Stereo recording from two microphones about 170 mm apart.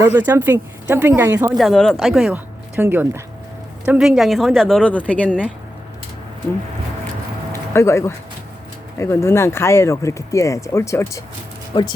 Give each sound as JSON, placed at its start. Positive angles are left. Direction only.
{"t": 0.0, "sound": "speech", "side_deg": -10}
{"t": 1.5, "sound": "speech", "side_deg": 0}
{"t": 7.5, "sound": "a sound", "side_deg": 15}
{"t": 9.0, "sound": "speech", "side_deg": 15}